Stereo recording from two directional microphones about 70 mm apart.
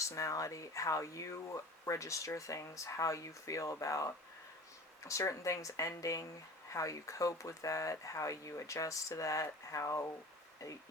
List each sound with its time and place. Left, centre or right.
0.0 s speech: left